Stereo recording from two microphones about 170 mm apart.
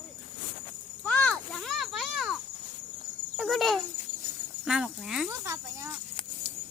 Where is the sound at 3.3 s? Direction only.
Centre (ahead or behind).